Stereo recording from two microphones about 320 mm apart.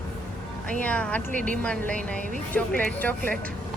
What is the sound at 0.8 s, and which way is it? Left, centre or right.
Speech, centre.